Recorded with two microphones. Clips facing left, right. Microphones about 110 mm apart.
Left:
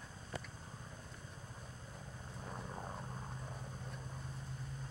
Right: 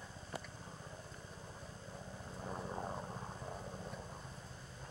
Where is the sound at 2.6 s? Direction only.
15° right (ahead or behind).